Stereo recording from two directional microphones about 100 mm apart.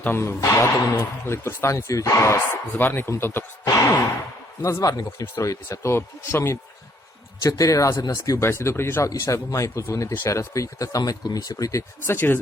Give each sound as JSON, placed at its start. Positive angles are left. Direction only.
{"t": 0.0, "sound": "speech", "side_deg": 25}
{"t": 4.6, "sound": "speech", "side_deg": 35}
{"t": 7.4, "sound": "speech", "side_deg": 35}